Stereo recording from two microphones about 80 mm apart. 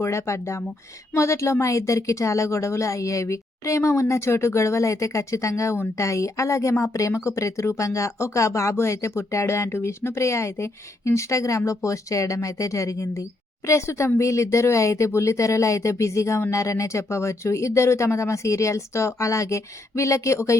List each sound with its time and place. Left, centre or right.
0.0 s speech: left